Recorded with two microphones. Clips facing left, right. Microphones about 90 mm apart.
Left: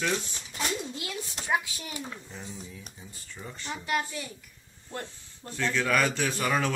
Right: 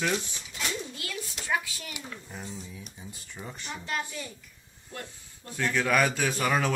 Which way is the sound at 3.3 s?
15° right (ahead or behind).